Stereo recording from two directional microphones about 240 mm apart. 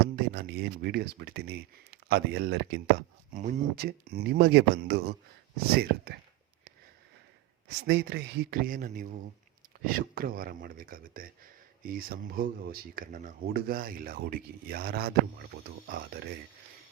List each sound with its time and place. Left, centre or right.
0.3 s speech: right
3.3 s speech: right
7.9 s speech: right